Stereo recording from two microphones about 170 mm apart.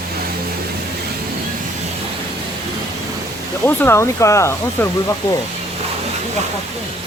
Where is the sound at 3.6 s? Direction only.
15° left (ahead or behind).